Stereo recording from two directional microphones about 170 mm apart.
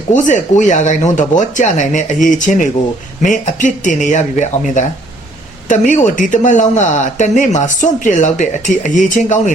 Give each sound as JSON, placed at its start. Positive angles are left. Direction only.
{"t": 0.1, "sound": "speech", "side_deg": 45}